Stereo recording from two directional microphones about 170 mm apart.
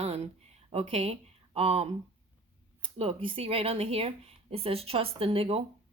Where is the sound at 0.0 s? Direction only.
35° right (ahead or behind).